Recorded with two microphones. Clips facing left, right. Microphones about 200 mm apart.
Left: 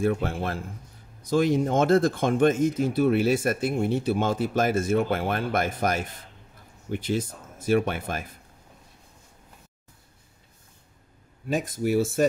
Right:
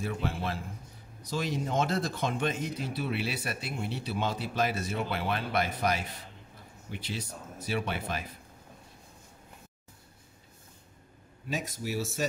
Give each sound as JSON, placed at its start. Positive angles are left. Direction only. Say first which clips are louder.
{"t": 0.0, "sound": "speech", "louder": "left 8 dB", "side_deg": 50}
{"t": 11.4, "sound": "speech", "louder": "left 9 dB", "side_deg": 50}